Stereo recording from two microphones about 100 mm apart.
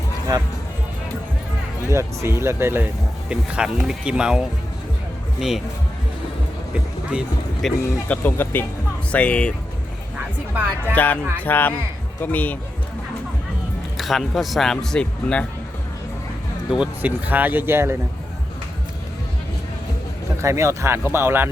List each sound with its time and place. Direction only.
0.3 s speech: 40° right (ahead or behind)
1.9 s speech: 30° right (ahead or behind)
3.2 s speech: 10° right (ahead or behind)
6.7 s music: 10° right (ahead or behind)
7.6 s speech: centre (ahead or behind)
8.0 s speech: 15° left (ahead or behind)
10.5 s speech: 20° right (ahead or behind)
10.9 s speech: 15° left (ahead or behind)
13.9 s speech: centre (ahead or behind)
16.7 s speech: 10° right (ahead or behind)
20.4 s speech: 30° right (ahead or behind)